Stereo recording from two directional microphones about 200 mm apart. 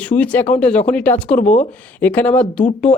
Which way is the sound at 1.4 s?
40° left (ahead or behind).